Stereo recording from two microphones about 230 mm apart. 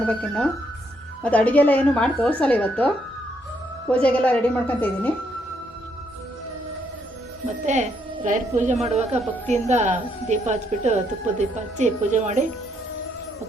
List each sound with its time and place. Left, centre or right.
0.1 s a woman's voice: centre
4.0 s a woman's voice: centre
7.6 s speech: right